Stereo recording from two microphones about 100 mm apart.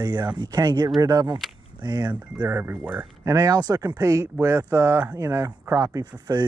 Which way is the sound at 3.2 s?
35° right (ahead or behind).